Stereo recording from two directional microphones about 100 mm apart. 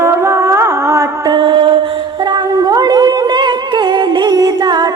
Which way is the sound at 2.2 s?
45° right (ahead or behind).